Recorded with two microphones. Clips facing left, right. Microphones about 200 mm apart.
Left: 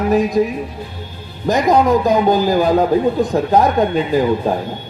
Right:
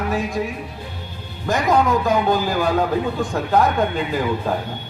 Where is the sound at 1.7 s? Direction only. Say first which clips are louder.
Left 4 dB; 40° left (ahead or behind).